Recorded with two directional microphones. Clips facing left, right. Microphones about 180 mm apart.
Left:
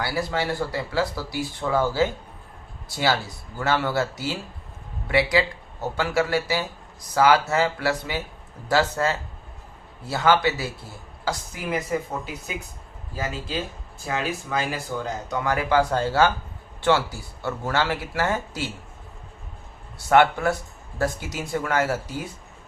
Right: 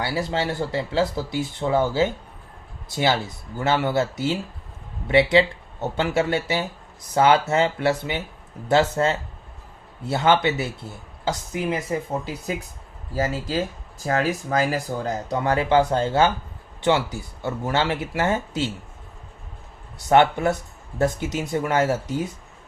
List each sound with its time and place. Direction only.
0.0 s speech: 25° right (ahead or behind)
12.2 s speech: 35° right (ahead or behind)
14.0 s speech: 40° right (ahead or behind); by 18.7 s 20° right (ahead or behind)
20.1 s speech: 20° right (ahead or behind)